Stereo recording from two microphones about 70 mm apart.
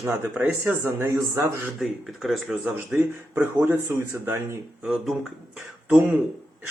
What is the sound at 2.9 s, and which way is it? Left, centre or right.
Speech, right.